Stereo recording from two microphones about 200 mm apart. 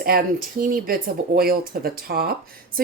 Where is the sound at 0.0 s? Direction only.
50° right (ahead or behind).